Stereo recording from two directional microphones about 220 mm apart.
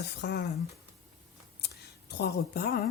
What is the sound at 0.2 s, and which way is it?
Speech, 50° left (ahead or behind).